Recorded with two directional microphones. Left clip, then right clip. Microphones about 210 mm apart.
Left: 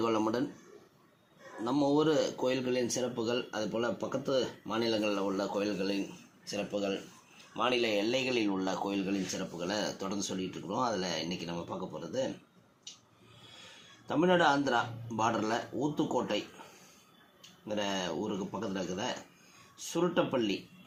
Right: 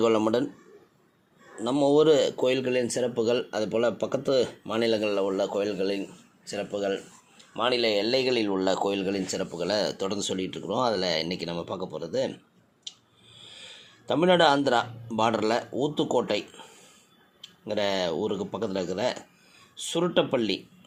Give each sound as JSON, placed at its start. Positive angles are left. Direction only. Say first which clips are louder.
{"t": 0.0, "sound": "speech", "louder": "right 8 dB", "side_deg": -45}
{"t": 1.6, "sound": "speech", "louder": "right 8 dB", "side_deg": -45}
{"t": 14.1, "sound": "speech", "louder": "right 6 dB", "side_deg": -50}
{"t": 17.7, "sound": "speech", "louder": "right 8 dB", "side_deg": -50}